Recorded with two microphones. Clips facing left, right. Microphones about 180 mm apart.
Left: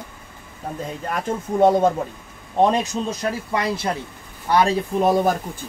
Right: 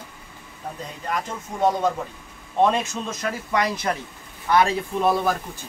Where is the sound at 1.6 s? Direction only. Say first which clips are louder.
Left 5 dB; 50° left (ahead or behind).